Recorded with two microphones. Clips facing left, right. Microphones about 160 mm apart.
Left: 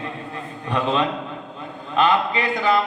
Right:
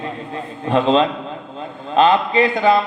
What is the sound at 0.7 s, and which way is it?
A man's voice, 25° right (ahead or behind).